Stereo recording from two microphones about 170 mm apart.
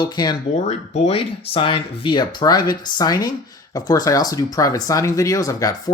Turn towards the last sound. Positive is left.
turn(degrees=20)  # may be behind; listen again after turning